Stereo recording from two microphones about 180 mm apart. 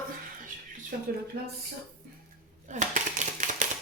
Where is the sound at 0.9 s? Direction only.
55° right (ahead or behind).